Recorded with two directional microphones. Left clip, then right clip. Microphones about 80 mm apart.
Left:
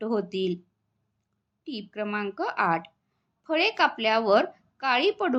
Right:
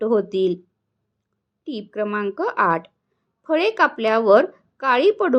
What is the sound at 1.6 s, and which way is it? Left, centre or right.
Speech, right.